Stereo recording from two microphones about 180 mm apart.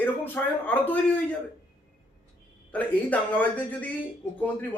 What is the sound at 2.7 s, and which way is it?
A man's voice, 10° left (ahead or behind).